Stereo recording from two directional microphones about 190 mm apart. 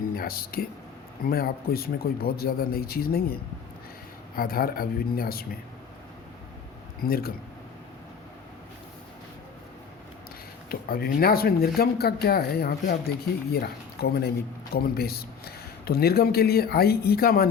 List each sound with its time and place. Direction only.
0.1 s speech: 50° left (ahead or behind)
4.4 s speech: 50° left (ahead or behind)
7.0 s speech: 50° left (ahead or behind)
10.7 s speech: 50° left (ahead or behind)